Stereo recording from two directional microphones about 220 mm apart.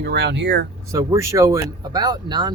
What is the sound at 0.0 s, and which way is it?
Speech, 50° right (ahead or behind).